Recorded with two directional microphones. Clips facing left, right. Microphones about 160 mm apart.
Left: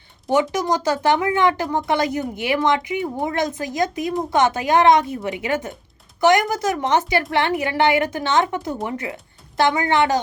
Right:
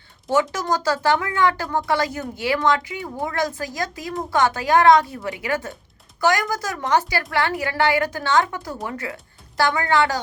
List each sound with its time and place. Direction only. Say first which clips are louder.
0.3 s speech: left 2 dB; 15° left (ahead or behind)